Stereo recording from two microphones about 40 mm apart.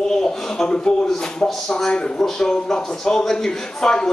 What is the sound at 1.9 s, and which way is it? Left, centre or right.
A man's voice, left.